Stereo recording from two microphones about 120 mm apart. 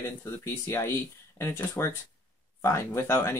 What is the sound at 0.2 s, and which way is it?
Speech, 20° left (ahead or behind).